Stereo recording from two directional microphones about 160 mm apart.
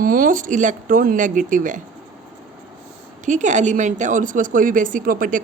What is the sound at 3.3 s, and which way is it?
A woman's voice, 50° right (ahead or behind).